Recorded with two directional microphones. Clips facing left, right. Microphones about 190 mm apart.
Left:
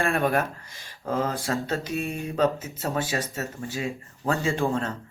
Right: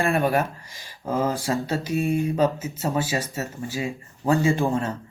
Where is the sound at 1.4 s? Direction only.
Centre (ahead or behind).